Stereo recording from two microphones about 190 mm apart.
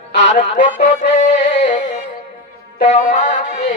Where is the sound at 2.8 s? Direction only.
35° left (ahead or behind).